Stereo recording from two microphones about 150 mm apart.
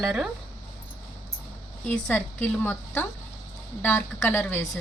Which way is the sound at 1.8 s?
10° left (ahead or behind).